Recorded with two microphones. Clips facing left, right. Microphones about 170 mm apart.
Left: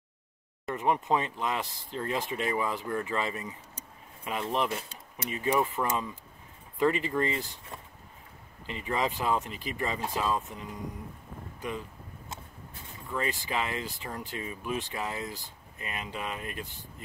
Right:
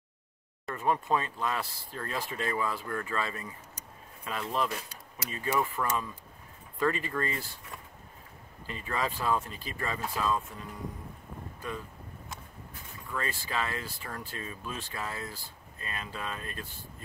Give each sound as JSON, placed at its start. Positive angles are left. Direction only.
{"t": 0.7, "sound": "speech", "side_deg": 20}
{"t": 13.1, "sound": "speech", "side_deg": 20}